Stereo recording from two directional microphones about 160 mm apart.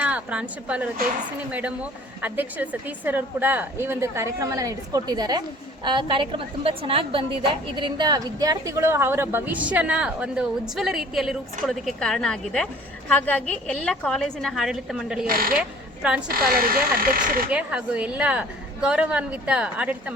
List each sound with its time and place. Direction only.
0.0 s a woman's voice: 5° right (ahead or behind)
15.3 s speech: 65° right (ahead or behind)
17.5 s a woman's voice: 5° right (ahead or behind)